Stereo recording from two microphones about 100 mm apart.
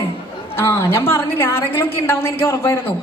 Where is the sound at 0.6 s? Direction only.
25° left (ahead or behind).